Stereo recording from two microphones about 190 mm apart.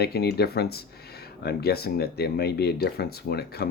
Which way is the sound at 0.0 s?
55° left (ahead or behind).